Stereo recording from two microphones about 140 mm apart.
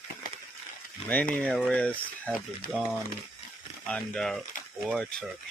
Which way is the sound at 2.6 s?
90° left.